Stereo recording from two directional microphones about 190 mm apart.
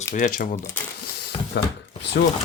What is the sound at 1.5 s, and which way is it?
Speech, 65° left (ahead or behind).